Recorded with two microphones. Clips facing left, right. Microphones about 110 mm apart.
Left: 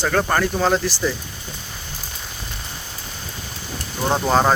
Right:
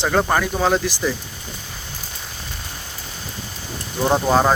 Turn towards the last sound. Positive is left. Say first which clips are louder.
# right 1 dB
turn(degrees=-5)  # may be behind; listen again after turning